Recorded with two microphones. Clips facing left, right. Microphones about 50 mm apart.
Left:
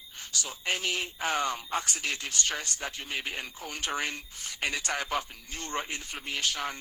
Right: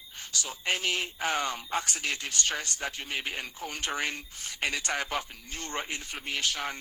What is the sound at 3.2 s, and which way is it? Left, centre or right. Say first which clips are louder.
Speech: right 1 dB; right.